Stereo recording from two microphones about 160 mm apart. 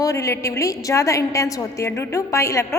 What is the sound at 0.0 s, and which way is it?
A woman's voice, 20° left (ahead or behind).